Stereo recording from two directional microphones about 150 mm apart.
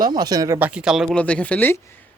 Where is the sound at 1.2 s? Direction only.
10° left (ahead or behind).